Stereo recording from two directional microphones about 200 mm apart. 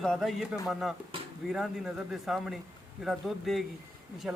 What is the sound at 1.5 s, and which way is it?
Speech, centre (ahead or behind).